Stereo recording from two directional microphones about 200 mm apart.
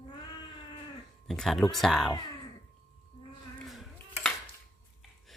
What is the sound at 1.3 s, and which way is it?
Speech, centre (ahead or behind).